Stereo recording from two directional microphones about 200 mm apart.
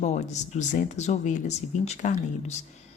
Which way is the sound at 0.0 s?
35° left (ahead or behind).